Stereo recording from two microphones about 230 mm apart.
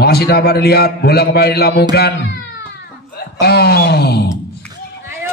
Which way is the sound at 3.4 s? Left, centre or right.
Left.